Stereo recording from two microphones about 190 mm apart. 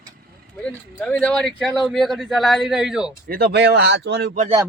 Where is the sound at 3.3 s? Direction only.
50° right (ahead or behind).